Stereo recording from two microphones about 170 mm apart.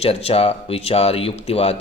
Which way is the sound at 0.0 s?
35° left (ahead or behind).